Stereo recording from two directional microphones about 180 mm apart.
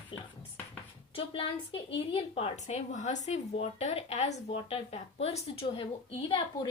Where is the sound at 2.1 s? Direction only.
30° left (ahead or behind).